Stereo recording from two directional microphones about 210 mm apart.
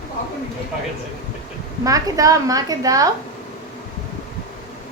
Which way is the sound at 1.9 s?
15° right (ahead or behind).